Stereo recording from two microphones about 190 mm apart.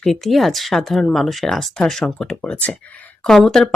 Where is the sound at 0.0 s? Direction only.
Centre (ahead or behind).